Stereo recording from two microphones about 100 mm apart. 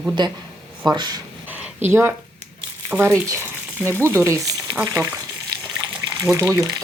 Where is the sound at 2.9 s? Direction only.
20° right (ahead or behind).